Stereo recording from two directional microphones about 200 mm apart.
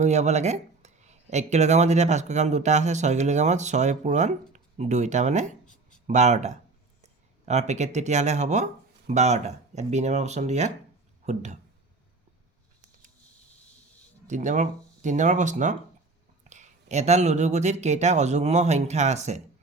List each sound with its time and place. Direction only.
0.0 s speech: 35° right (ahead or behind)
14.3 s speech: 35° right (ahead or behind)